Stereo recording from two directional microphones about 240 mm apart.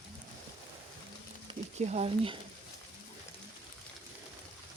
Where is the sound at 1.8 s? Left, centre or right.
Right.